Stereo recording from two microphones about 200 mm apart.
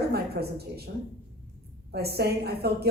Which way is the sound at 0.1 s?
50° right (ahead or behind).